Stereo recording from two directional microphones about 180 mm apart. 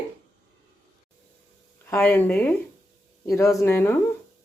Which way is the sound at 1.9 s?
10° left (ahead or behind).